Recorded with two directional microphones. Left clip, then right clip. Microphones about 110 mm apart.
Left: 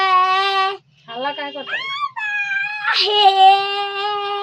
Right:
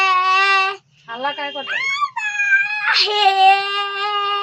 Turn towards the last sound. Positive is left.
turn(degrees=15)  # may be behind; listen again after turning